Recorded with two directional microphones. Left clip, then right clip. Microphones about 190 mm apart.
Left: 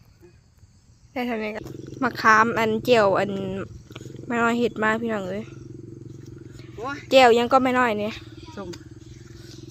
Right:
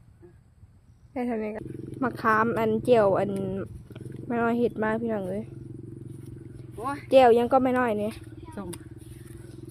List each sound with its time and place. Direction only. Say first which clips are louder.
1.1 s speech: left 3 dB; 10° right (ahead or behind)
6.7 s speech: left 1 dB; 60° right (ahead or behind)
7.1 s speech: left 3 dB; centre (ahead or behind)